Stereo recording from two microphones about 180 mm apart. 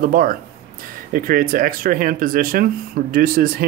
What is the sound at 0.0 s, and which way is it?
Speech, 50° right (ahead or behind).